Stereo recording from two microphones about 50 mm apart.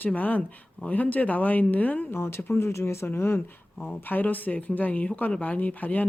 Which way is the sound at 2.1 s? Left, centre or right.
Left.